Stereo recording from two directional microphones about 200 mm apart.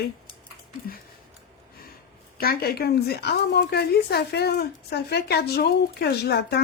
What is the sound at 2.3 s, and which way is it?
A woman's voice, 50° left (ahead or behind).